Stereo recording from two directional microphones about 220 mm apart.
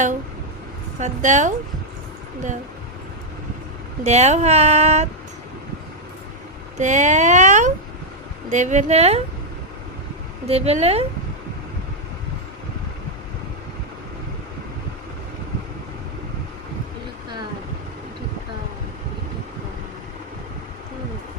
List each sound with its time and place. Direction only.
0.9 s speech: 35° right (ahead or behind)
4.0 s speech: 30° right (ahead or behind)
6.7 s speech: 35° right (ahead or behind)
10.4 s a woman's voice: 30° right (ahead or behind)